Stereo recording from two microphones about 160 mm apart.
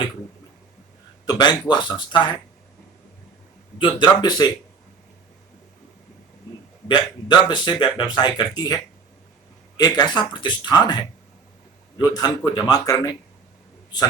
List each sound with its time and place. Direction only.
1.2 s speech: 25° left (ahead or behind)
4.0 s speech: 25° left (ahead or behind)
6.8 s speech: 30° left (ahead or behind)